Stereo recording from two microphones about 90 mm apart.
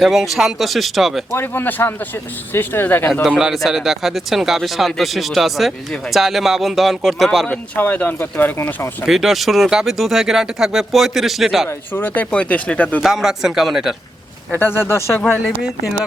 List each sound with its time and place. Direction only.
0.0 s speech: centre (ahead or behind)
1.3 s speech: 25° left (ahead or behind)
3.2 s speech: 5° right (ahead or behind)
7.8 s speech: 20° left (ahead or behind)
9.0 s speech: 5° right (ahead or behind)
11.7 s speech: 20° left (ahead or behind)
13.0 s speech: 5° right (ahead or behind)
14.5 s speech: 25° left (ahead or behind)